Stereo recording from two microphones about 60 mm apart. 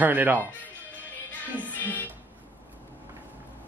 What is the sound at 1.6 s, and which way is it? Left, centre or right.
Music, left.